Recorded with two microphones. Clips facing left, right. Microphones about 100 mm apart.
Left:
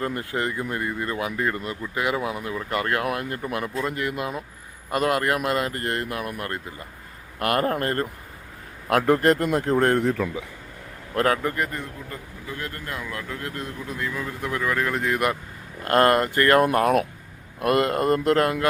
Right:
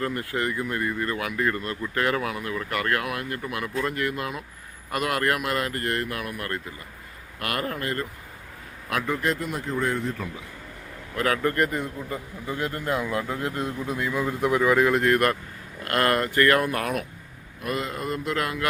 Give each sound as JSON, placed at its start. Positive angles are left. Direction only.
{"t": 0.0, "sound": "speech", "side_deg": 25}
{"t": 8.9, "sound": "speech", "side_deg": 55}
{"t": 11.4, "sound": "a man's voice", "side_deg": 5}
{"t": 11.7, "sound": "speech", "side_deg": -15}
{"t": 15.8, "sound": "speech", "side_deg": 30}
{"t": 17.6, "sound": "speech", "side_deg": 70}